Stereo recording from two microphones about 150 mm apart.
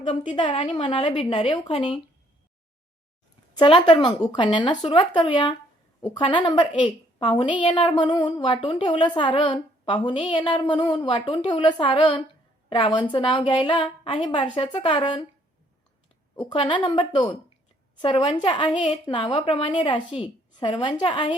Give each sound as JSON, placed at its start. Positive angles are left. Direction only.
{"t": 0.0, "sound": "a woman's voice", "side_deg": 35}
{"t": 3.6, "sound": "a woman's voice", "side_deg": 30}
{"t": 16.4, "sound": "a woman's voice", "side_deg": 35}